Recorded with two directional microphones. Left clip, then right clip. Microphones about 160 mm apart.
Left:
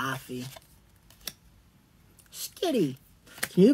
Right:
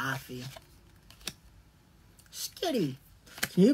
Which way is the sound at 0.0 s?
15° left (ahead or behind).